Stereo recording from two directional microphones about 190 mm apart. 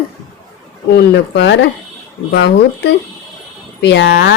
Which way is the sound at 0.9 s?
65° left (ahead or behind).